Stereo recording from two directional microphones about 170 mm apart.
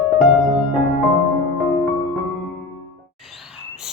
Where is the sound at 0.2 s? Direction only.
Centre (ahead or behind).